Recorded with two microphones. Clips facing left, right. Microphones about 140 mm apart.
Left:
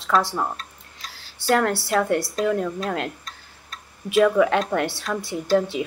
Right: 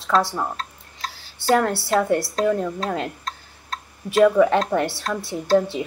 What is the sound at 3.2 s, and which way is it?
Tick-tock, 90° right.